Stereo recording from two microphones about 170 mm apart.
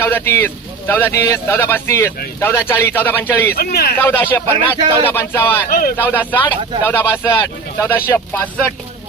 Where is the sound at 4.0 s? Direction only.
10° left (ahead or behind).